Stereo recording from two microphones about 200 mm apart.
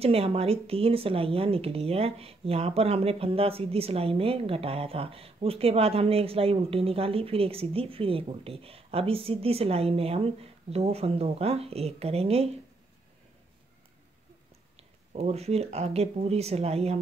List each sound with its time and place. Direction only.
0.0 s speech: 30° right (ahead or behind)
14.8 s speech: 30° right (ahead or behind)